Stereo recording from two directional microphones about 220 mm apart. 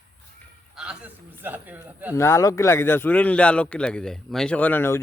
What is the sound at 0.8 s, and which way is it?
A man's voice, 5° right (ahead or behind).